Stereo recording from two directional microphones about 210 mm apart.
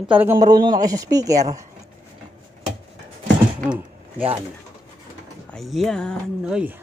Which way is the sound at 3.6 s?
5° right (ahead or behind).